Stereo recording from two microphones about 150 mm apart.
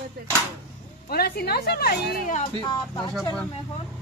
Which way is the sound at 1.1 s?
90° left.